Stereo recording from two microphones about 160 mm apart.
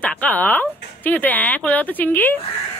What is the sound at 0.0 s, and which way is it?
A woman's voice, 10° left (ahead or behind).